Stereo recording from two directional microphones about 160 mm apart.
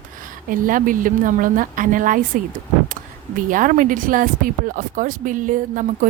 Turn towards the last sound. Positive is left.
turn(degrees=-55)  # may be behind; listen again after turning